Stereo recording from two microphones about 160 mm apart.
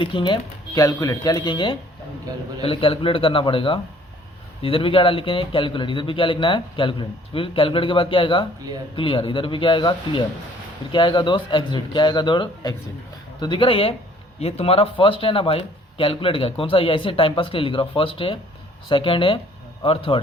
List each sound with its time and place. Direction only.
0.0 s speech: 30° left (ahead or behind)